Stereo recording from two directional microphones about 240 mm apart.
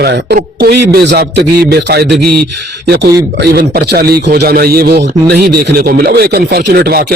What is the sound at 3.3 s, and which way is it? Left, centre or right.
A man's voice, right.